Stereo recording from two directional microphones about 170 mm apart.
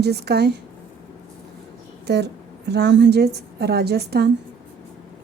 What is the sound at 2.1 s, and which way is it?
A woman's voice, 80° right.